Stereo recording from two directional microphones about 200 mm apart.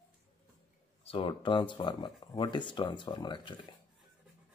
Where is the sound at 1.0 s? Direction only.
25° left (ahead or behind).